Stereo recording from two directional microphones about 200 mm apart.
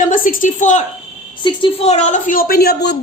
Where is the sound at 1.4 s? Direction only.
25° left (ahead or behind); by 2.9 s 55° left (ahead or behind).